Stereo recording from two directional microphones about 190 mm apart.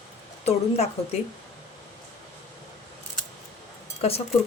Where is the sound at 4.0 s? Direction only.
30° left (ahead or behind).